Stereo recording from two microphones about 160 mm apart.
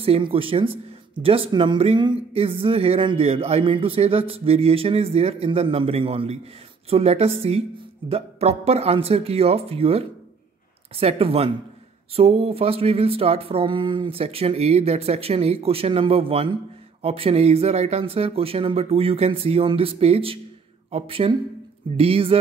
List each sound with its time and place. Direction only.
0.0 s speech: 35° right (ahead or behind)